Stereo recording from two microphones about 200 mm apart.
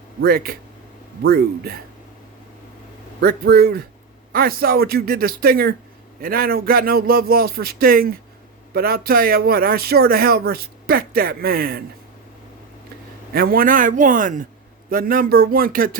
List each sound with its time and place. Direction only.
0.2 s speech: 50° right (ahead or behind)
3.2 s speech: 50° right (ahead or behind)
13.3 s a man's voice: 45° right (ahead or behind)